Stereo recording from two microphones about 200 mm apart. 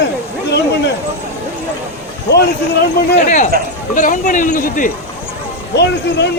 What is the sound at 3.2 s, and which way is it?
Speech, 40° left (ahead or behind).